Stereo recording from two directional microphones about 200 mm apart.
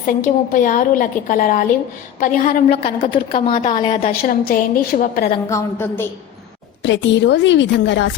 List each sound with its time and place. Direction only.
0.1 s a woman's voice: 40° left (ahead or behind)
2.6 s a woman's voice: 30° left (ahead or behind)
4.0 s a woman's voice: 45° left (ahead or behind)
5.5 s a woman's voice: 15° left (ahead or behind)
6.8 s a woman's voice: 65° left (ahead or behind)